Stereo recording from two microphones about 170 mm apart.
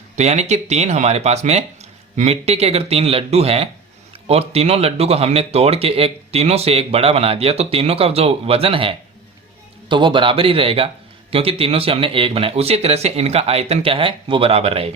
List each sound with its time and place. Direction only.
0.2 s a man's voice: 40° right (ahead or behind)